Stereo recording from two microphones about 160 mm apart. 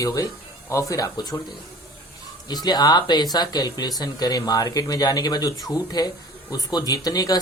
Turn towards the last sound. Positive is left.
turn(degrees=25)  # may be behind; listen again after turning